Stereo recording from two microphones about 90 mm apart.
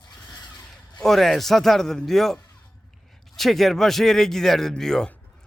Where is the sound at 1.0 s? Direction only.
5° left (ahead or behind).